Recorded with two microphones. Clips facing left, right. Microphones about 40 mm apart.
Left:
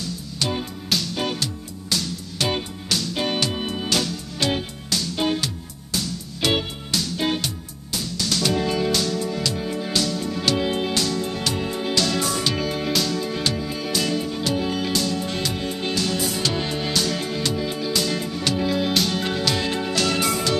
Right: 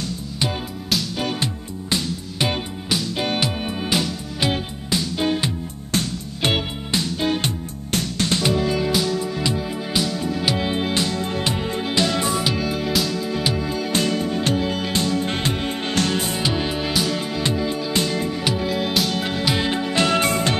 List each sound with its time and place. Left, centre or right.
1.4 s music: right
5.9 s music: right
6.9 s music: right
7.9 s music: right
8.3 s music: right
8.6 s music: centre
10.6 s music: right
12.6 s music: centre
13.7 s music: right
16.3 s music: centre
17.4 s music: right
18.4 s music: centre; by 20.5 s right